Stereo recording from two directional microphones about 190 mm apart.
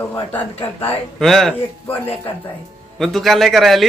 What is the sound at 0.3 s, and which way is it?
Speech, 10° left (ahead or behind).